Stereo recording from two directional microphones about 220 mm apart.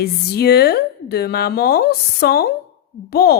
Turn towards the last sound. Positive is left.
turn(degrees=45)  # may be behind; listen again after turning